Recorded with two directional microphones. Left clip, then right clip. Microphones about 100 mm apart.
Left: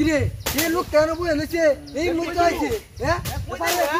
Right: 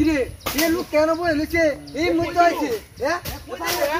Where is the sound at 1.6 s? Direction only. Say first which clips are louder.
Left 1 dB; 20° left (ahead or behind).